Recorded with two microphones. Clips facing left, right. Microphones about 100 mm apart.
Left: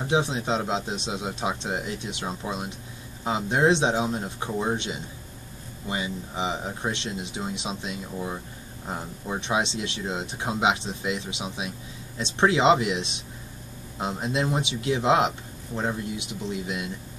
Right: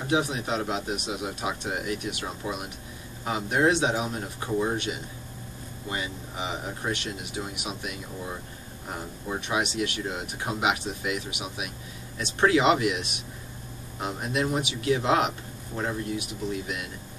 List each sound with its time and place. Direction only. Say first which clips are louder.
0.1 s speech: left 1 dB; 25° left (ahead or behind)